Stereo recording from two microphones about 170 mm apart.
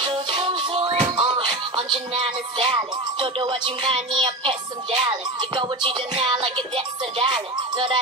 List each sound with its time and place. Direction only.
0.0 s music: 30° right (ahead or behind)